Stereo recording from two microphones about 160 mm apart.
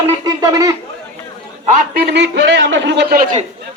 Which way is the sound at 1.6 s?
50° right (ahead or behind).